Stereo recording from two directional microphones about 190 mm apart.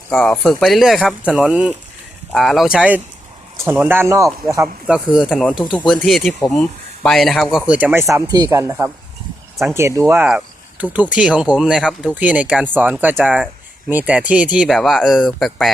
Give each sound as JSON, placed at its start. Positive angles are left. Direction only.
{"t": 0.1, "sound": "speech", "side_deg": 5}
{"t": 4.9, "sound": "speech", "side_deg": -5}